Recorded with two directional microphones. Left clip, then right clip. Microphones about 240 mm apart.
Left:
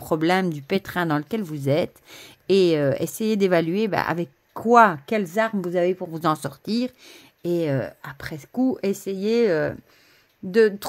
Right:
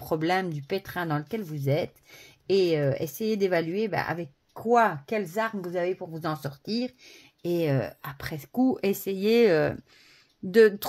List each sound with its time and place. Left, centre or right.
0.0 s speech: left
7.4 s speech: centre